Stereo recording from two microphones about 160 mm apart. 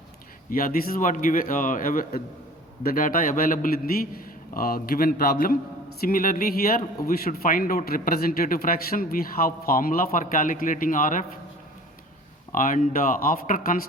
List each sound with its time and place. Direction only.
0.5 s a man's voice: 65° left (ahead or behind)
12.5 s a man's voice: 55° left (ahead or behind)